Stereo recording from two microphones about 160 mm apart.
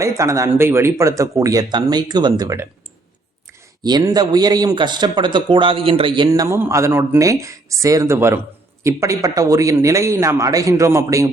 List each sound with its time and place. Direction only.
0.0 s speech: 20° right (ahead or behind)
3.8 s speech: 25° right (ahead or behind)